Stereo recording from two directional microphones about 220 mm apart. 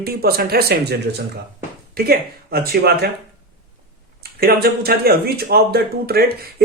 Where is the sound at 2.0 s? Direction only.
45° right (ahead or behind).